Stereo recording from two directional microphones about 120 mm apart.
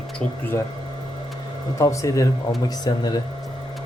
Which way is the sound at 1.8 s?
25° left (ahead or behind).